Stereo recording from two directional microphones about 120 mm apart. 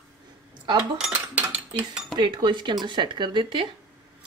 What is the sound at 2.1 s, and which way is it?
Speech, 40° right (ahead or behind).